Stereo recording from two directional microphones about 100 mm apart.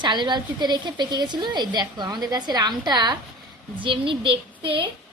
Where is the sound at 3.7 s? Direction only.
55° right (ahead or behind).